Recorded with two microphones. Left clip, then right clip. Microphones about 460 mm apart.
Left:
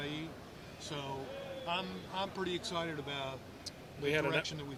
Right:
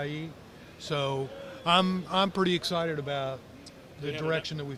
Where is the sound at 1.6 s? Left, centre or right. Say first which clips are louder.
Right 15 dB; right.